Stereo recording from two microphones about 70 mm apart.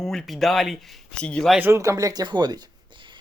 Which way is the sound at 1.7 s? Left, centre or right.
Right.